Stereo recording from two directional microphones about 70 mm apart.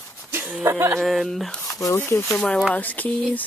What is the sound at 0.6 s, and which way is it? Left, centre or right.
Speech, right.